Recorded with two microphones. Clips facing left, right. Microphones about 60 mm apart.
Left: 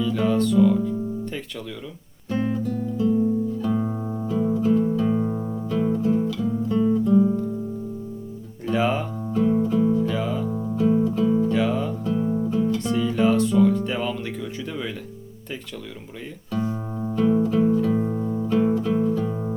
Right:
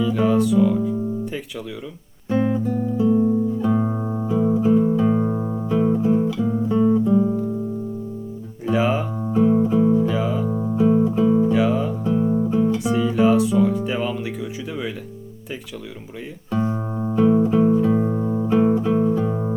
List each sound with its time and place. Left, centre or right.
0.0 s speech: centre
2.3 s music: centre
7.2 s guitar: centre
8.6 s music: centre
16.5 s music: right